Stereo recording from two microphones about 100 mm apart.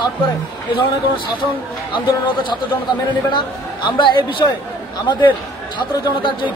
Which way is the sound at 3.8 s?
55° left (ahead or behind).